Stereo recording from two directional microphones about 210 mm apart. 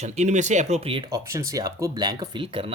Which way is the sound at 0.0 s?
35° right (ahead or behind).